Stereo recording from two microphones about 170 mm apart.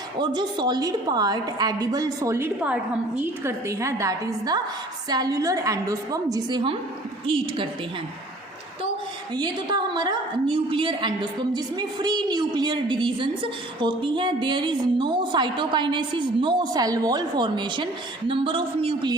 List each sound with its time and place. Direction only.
0.2 s a woman's voice: 25° right (ahead or behind)
9.3 s a woman's voice: 25° right (ahead or behind)